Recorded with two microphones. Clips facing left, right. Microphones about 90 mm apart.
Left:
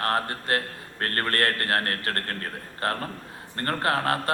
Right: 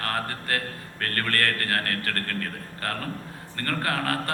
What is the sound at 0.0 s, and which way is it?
A man's voice, 25° left (ahead or behind).